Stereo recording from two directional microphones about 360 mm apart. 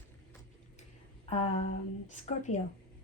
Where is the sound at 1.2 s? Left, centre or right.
Centre.